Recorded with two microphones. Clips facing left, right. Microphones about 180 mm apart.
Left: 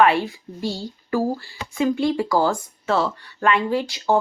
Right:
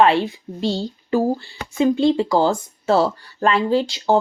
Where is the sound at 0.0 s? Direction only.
25° right (ahead or behind).